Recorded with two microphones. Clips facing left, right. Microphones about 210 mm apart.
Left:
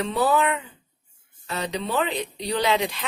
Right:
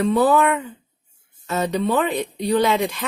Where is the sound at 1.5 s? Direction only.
50° right (ahead or behind).